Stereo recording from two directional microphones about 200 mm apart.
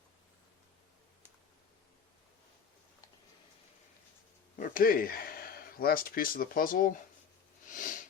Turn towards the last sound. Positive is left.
turn(degrees=40)  # may be behind; listen again after turning